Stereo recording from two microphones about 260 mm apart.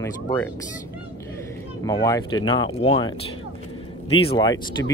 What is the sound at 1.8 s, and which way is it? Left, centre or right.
Speech, centre.